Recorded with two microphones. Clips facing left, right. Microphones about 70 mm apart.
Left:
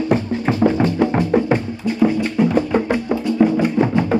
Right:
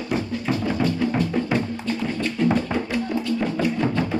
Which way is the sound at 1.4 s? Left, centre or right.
Left.